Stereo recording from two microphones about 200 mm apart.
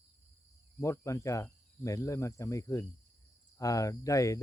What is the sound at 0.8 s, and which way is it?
Speech, 15° left (ahead or behind).